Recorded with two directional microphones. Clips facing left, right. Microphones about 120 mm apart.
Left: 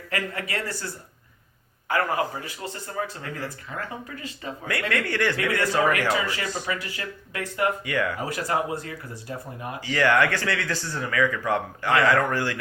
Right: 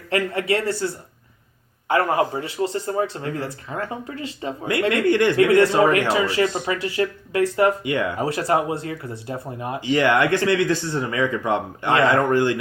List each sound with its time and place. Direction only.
0.1 s speech: 25° right (ahead or behind)
1.9 s speech: 25° right (ahead or behind)